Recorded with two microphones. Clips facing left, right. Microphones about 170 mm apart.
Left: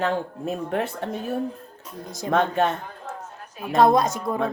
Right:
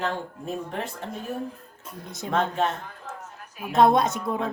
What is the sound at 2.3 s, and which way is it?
Speech, 65° left (ahead or behind).